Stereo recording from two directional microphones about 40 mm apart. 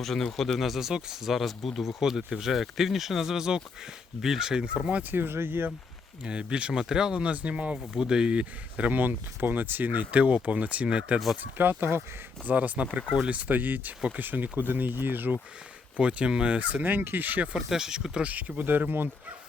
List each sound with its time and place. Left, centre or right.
0.0 s speech: centre
0.6 s speech: centre
5.1 s speech: right
6.2 s speech: right
7.9 s speech: right
8.7 s speech: right
11.5 s speech: right
12.5 s speech: right
16.0 s speech: right
17.0 s speech: right
17.7 s speech: centre
18.3 s speech: right
18.6 s speech: right